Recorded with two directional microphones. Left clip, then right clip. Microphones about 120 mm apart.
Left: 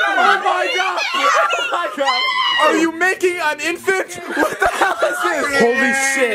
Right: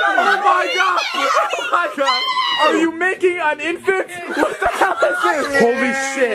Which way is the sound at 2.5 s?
10° left (ahead or behind).